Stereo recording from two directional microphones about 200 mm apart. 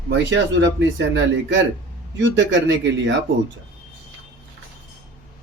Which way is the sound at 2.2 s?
65° right (ahead or behind).